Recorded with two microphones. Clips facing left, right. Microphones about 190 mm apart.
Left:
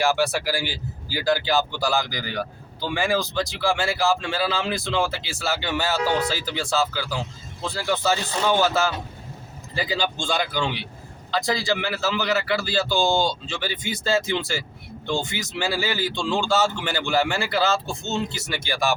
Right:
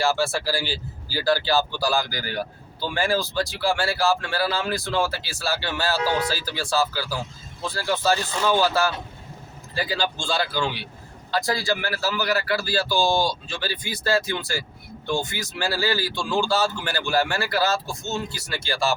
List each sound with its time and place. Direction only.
0.0 s speech: 15° left (ahead or behind)